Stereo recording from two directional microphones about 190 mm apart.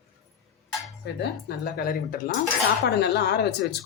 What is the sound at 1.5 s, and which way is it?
Speech, 55° left (ahead or behind).